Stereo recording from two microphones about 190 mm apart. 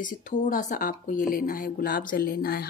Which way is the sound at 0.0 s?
45° left (ahead or behind).